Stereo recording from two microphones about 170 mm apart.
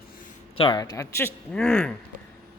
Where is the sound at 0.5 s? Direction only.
30° left (ahead or behind).